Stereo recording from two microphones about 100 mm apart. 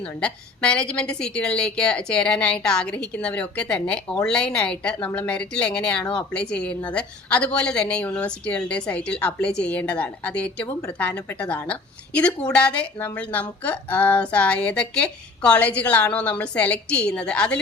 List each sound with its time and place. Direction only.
0.2 s speech: 10° left (ahead or behind)